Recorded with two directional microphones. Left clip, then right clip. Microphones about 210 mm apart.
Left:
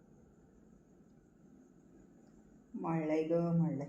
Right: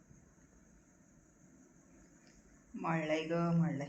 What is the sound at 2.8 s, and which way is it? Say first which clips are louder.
A woman's voice: left 1 dB; 10° left (ahead or behind).